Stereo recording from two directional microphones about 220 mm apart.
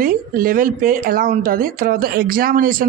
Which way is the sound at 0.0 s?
40° right (ahead or behind).